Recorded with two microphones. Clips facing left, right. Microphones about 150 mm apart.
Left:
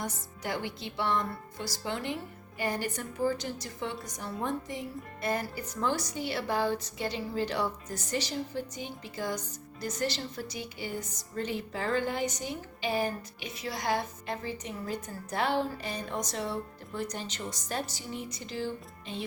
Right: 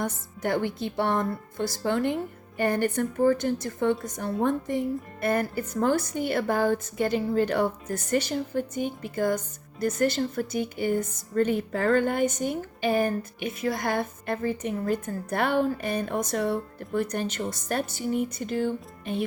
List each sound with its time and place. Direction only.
0.0 s speech: 55° right (ahead or behind)